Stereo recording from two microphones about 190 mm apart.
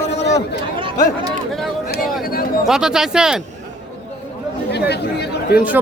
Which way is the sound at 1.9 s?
50° left (ahead or behind).